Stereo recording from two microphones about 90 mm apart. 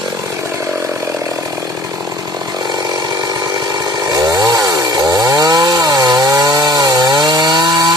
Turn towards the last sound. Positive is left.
turn(degrees=-50)  # may be behind; listen again after turning